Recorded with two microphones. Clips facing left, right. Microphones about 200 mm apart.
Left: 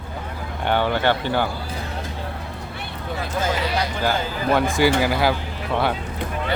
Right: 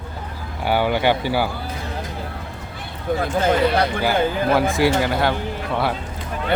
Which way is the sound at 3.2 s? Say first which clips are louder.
Right 6 dB; 55° right (ahead or behind).